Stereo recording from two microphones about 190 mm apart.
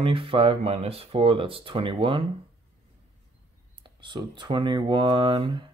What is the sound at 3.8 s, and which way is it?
Speech, 25° right (ahead or behind).